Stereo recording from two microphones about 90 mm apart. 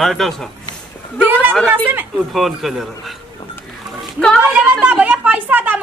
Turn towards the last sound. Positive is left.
turn(degrees=-20)  # may be behind; listen again after turning